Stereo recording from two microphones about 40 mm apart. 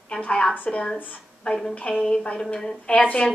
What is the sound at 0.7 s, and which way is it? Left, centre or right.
A woman's voice, left.